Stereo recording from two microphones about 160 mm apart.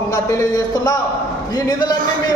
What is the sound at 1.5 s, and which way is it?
Speech, 25° left (ahead or behind).